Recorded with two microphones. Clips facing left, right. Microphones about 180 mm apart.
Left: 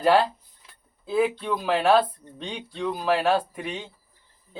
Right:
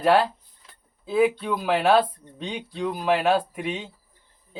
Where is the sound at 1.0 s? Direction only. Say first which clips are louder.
Right 2 dB; centre (ahead or behind).